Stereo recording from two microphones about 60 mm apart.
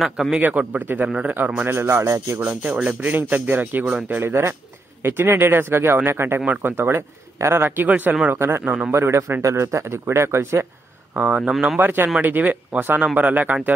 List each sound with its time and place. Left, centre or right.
0.4 s speech: right
1.7 s speech: right
2.3 s speech: right
7.8 s speech: right
8.4 s speech: right
9.4 s speech: right
11.1 s speech: right
11.8 s speech: right